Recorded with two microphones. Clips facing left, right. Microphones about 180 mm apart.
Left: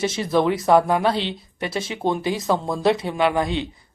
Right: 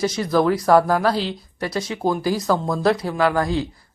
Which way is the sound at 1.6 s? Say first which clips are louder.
Right 1 dB; 25° left (ahead or behind).